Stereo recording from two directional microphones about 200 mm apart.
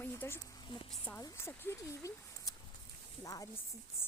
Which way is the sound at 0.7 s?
25° left (ahead or behind).